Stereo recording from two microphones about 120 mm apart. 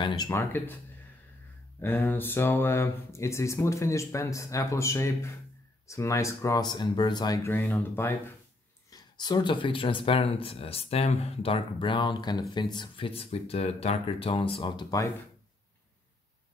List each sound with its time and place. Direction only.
0.3 s speech: 20° left (ahead or behind)
1.8 s speech: 15° left (ahead or behind)
6.6 s speech: 35° left (ahead or behind)
7.4 s speech: 15° left (ahead or behind)
8.9 s speech: 35° left (ahead or behind)